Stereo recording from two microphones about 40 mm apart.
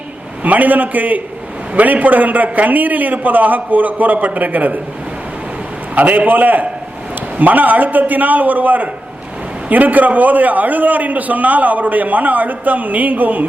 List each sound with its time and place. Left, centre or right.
0.4 s a man's voice: right
5.9 s a man's voice: right